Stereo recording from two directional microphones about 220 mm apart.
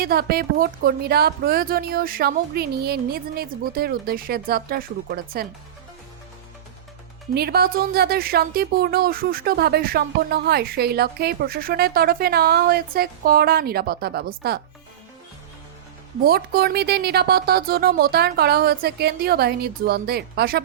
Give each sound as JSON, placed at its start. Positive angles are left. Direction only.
{"t": 0.0, "sound": "a woman's voice", "side_deg": -45}
{"t": 7.3, "sound": "a woman's voice", "side_deg": -45}
{"t": 16.2, "sound": "a woman's voice", "side_deg": -45}